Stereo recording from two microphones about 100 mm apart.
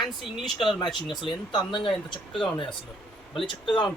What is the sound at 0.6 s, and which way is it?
Speech, 55° left (ahead or behind).